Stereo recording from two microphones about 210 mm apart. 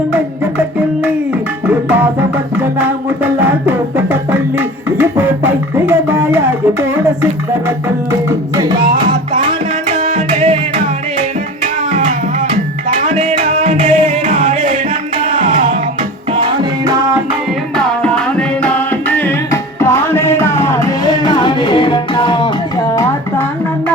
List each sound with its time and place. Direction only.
2.6 s music: 10° right (ahead or behind)
8.5 s music: 20° right (ahead or behind)
11.6 s music: 35° right (ahead or behind)
16.3 s music: 25° right (ahead or behind)
17.7 s music: 5° left (ahead or behind); by 22.4 s 25° left (ahead or behind)